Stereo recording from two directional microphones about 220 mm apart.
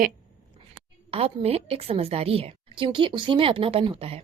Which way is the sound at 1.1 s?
25° right (ahead or behind).